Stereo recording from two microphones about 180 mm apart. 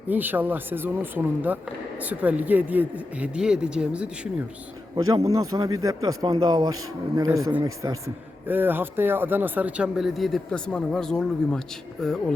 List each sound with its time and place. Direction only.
0.1 s a man's voice: 10° right (ahead or behind)
5.0 s a man's voice: 20° right (ahead or behind); by 12.3 s 5° left (ahead or behind)